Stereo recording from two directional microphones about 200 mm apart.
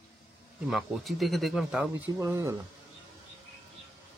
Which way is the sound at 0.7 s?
Centre (ahead or behind).